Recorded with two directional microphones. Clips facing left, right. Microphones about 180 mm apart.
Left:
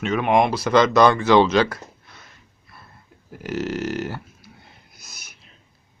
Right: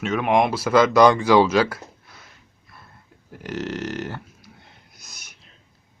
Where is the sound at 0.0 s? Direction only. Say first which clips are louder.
Left 1 dB; centre (ahead or behind).